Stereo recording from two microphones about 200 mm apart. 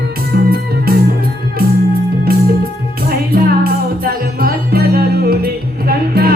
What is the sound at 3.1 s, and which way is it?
Music, 50° right (ahead or behind).